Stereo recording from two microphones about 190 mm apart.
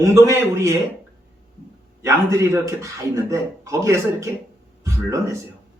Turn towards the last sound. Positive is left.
turn(degrees=-15)  # may be behind; listen again after turning